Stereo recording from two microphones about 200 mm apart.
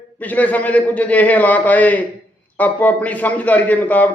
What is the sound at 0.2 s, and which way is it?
A man's voice, 5° left (ahead or behind).